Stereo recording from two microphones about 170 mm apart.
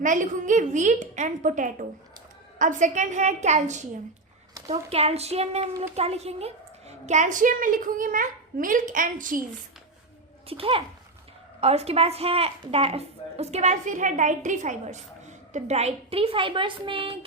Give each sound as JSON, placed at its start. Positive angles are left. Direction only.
{"t": 0.0, "sound": "a woman's voice", "side_deg": -50}
{"t": 10.4, "sound": "a woman's voice", "side_deg": -35}